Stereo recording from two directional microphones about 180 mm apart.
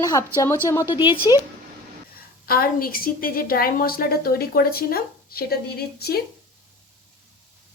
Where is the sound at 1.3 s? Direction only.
25° left (ahead or behind).